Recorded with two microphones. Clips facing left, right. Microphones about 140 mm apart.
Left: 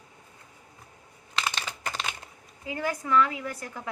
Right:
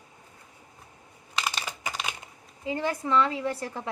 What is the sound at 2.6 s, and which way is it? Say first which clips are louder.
A woman's voice: right 2 dB; 25° right (ahead or behind).